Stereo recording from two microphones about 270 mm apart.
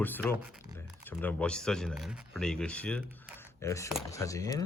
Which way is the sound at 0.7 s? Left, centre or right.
Centre.